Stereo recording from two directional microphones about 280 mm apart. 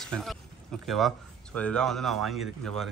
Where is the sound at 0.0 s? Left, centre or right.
Centre.